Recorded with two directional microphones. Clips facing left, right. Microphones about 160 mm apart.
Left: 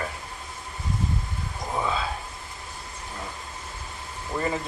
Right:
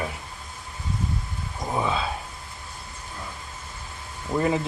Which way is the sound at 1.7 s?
15° right (ahead or behind).